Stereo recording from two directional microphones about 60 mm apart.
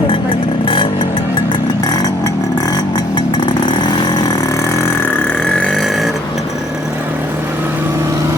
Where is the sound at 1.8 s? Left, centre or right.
Left.